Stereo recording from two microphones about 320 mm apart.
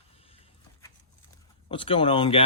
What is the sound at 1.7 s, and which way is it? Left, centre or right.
Speech, centre.